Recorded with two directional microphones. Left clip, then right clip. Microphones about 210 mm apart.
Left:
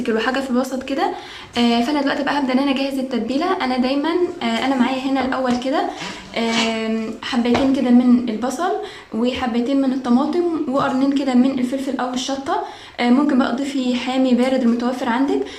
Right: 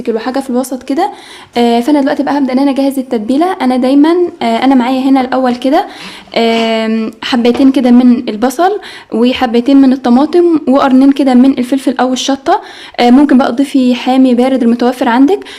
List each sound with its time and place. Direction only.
0.0 s a woman's voice: 25° right (ahead or behind); by 15.4 s 40° right (ahead or behind)